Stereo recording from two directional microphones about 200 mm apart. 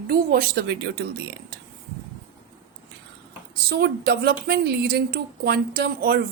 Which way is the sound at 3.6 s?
55° right (ahead or behind).